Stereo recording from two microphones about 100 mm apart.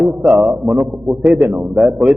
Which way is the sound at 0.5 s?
Centre (ahead or behind).